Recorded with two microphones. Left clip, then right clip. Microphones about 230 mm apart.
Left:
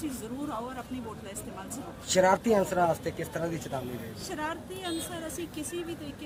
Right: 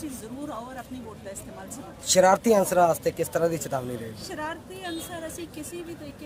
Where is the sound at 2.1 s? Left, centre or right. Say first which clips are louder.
Right 5 dB; right.